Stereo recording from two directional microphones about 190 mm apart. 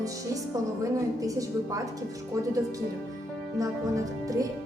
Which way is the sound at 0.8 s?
15° right (ahead or behind).